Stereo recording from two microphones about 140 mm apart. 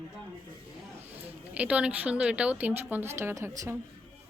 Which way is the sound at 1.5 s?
10° right (ahead or behind).